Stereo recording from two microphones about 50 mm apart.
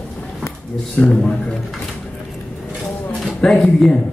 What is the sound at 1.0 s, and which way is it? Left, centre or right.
Speech, left.